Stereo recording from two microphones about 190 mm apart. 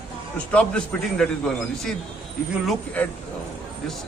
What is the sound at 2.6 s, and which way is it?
Speech, 10° left (ahead or behind).